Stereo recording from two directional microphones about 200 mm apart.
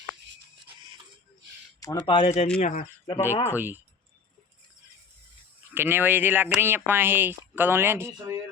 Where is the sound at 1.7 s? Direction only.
20° left (ahead or behind); by 2.8 s 40° left (ahead or behind).